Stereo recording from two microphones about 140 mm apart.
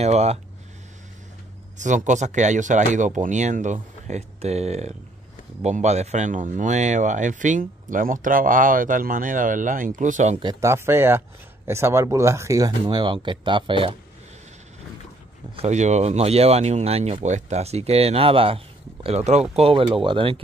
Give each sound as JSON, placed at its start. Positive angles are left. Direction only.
{"t": 0.0, "sound": "speech", "side_deg": -50}
{"t": 1.8, "sound": "speech", "side_deg": -60}
{"t": 10.4, "sound": "speech", "side_deg": -25}
{"t": 12.8, "sound": "speech", "side_deg": -35}
{"t": 15.5, "sound": "speech", "side_deg": -50}
{"t": 19.0, "sound": "speech", "side_deg": -50}